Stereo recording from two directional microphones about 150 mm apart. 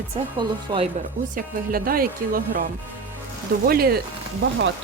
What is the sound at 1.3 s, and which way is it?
Speech, 75° right (ahead or behind).